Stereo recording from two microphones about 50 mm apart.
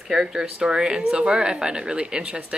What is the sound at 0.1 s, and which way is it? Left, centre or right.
Speech, centre.